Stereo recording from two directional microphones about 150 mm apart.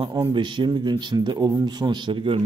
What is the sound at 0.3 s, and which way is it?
A man's voice, 30° right (ahead or behind).